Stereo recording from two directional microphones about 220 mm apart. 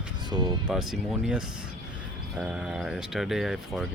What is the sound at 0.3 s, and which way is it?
Speech, 20° right (ahead or behind).